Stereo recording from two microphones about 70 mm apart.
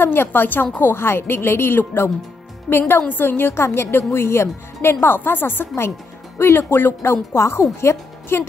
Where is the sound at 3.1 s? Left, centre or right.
Left.